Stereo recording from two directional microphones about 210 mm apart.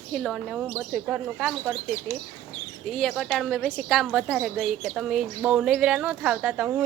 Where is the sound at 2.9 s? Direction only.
Centre (ahead or behind).